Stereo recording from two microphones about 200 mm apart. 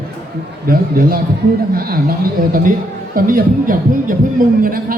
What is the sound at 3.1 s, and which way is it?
A man's voice, 45° right (ahead or behind).